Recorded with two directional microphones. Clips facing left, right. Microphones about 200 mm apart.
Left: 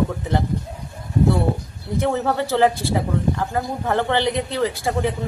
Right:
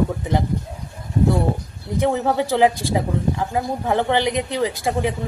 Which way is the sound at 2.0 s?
15° right (ahead or behind).